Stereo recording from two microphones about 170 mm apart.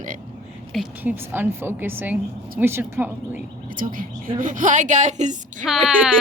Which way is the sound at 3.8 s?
55° right (ahead or behind).